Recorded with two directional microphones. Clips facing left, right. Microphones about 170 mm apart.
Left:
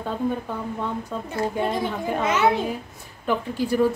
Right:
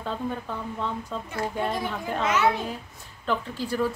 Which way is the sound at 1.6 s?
20° left (ahead or behind).